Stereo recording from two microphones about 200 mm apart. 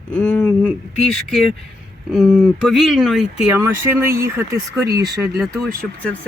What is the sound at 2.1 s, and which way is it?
Speech, centre (ahead or behind).